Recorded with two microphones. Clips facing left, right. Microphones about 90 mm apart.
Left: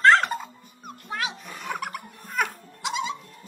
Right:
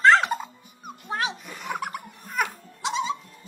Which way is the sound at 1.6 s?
20° right (ahead or behind).